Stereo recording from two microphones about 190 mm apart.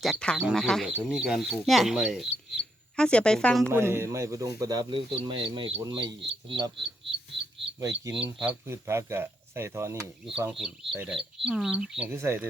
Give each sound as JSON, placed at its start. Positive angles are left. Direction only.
{"t": 0.0, "sound": "speech", "side_deg": 5}
{"t": 3.7, "sound": "speech", "side_deg": -15}
{"t": 7.8, "sound": "speech", "side_deg": -15}
{"t": 10.3, "sound": "speech", "side_deg": -5}